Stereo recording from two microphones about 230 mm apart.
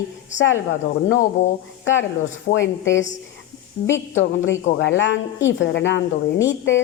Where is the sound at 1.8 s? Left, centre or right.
Left.